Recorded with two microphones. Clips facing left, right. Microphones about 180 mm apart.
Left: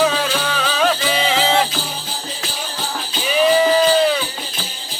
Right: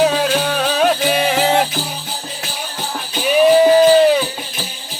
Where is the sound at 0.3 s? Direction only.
45° right (ahead or behind).